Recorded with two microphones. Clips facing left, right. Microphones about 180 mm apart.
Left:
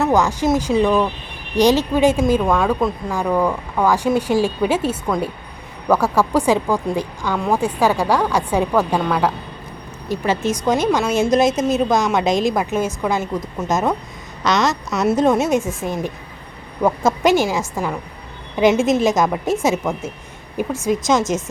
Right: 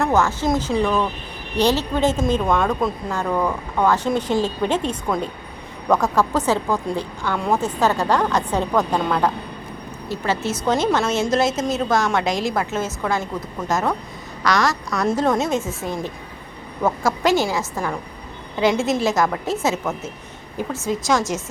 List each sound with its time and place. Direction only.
0.0 s a woman's voice: 15° left (ahead or behind)
2.2 s speech: centre (ahead or behind)
3.1 s a woman's voice: 10° left (ahead or behind)